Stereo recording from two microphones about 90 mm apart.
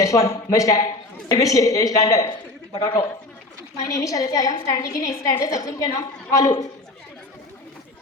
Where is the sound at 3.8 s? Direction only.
40° left (ahead or behind).